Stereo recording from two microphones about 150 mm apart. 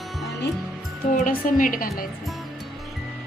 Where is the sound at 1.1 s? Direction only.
65° left (ahead or behind).